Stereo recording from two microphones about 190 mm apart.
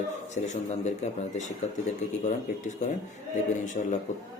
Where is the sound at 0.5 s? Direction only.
35° left (ahead or behind).